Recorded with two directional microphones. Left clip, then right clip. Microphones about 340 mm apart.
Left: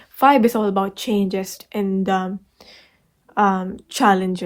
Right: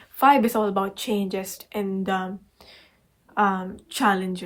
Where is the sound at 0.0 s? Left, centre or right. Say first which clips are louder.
Left 3 dB; left.